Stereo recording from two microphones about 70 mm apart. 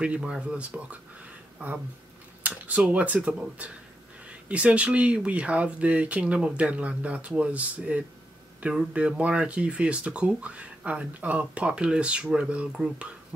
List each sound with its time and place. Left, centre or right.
0.0 s speech: centre
2.4 s speech: right